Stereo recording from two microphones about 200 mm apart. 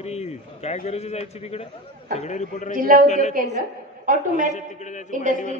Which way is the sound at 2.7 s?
45° right (ahead or behind).